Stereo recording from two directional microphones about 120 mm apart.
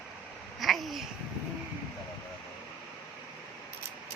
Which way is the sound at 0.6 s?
Centre (ahead or behind).